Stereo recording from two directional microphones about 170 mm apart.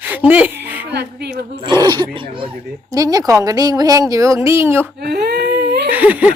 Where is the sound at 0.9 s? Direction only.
75° right (ahead or behind).